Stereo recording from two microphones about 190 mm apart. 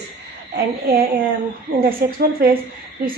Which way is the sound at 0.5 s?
55° right (ahead or behind).